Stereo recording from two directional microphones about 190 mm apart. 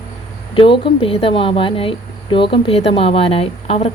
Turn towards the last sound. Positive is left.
turn(degrees=30)  # may be behind; listen again after turning